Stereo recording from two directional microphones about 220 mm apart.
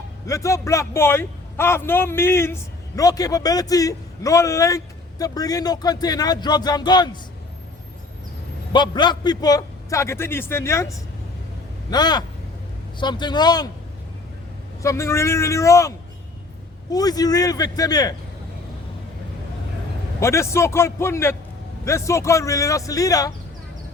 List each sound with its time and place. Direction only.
0.3 s a man's voice: 15° left (ahead or behind)
8.7 s a man's voice: 20° left (ahead or behind)
14.8 s a man's voice: 15° left (ahead or behind)
16.9 s a man's voice: 15° left (ahead or behind)
20.1 s a man's voice: 10° left (ahead or behind)